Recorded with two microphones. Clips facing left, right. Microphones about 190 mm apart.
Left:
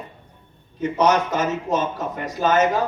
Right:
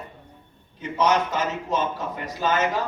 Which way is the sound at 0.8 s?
45° left (ahead or behind).